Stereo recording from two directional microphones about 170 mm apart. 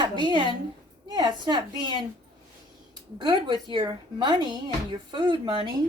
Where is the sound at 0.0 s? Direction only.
25° right (ahead or behind).